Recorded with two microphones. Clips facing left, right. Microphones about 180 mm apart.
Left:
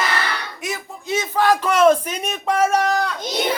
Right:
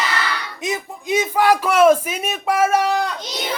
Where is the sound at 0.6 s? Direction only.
15° right (ahead or behind).